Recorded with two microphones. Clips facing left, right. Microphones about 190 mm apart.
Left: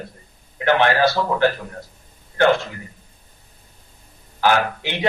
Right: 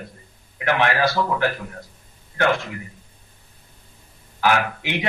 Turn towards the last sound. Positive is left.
turn(degrees=30)  # may be behind; listen again after turning